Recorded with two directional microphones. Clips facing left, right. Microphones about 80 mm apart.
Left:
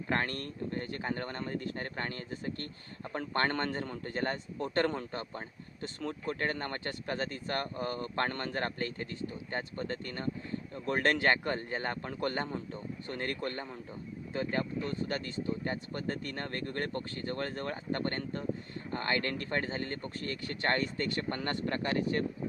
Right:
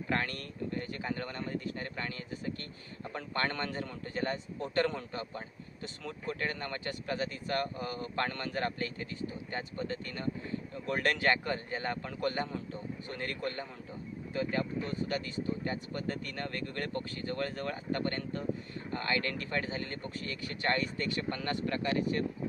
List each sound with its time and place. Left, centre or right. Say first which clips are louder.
0.1 s speech: left 2 dB; left
15.2 s speech: even; left